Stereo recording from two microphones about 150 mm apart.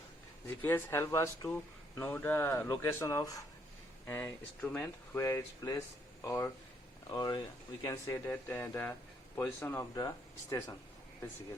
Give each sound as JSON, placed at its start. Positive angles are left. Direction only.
{"t": 0.4, "sound": "speech", "side_deg": 15}
{"t": 4.0, "sound": "speech", "side_deg": 10}
{"t": 5.2, "sound": "speech", "side_deg": 25}